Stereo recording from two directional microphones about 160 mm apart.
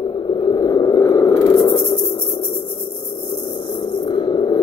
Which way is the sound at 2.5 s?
35° left (ahead or behind).